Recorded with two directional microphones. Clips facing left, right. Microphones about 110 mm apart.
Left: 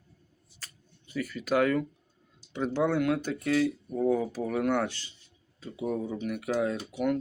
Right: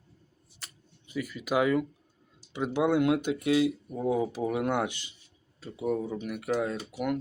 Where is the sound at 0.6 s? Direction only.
15° right (ahead or behind).